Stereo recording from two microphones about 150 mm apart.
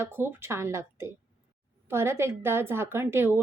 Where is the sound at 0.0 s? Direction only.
15° right (ahead or behind).